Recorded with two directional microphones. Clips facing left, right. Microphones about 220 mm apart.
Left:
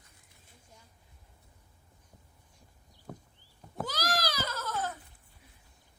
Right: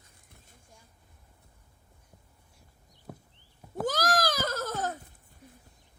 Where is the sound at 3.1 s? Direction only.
5° right (ahead or behind).